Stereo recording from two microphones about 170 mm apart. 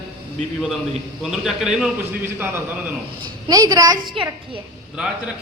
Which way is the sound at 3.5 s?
20° right (ahead or behind).